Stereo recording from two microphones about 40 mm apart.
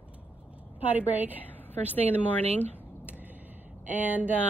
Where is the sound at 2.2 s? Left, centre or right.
Left.